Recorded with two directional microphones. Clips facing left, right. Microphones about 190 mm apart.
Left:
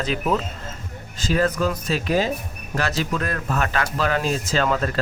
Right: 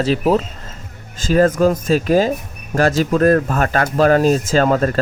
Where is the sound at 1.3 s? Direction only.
50° right (ahead or behind).